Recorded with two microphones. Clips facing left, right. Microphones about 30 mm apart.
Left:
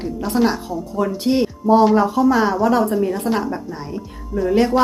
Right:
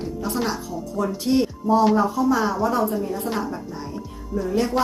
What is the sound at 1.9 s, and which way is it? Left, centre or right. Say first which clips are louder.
Speech: left 4 dB; left.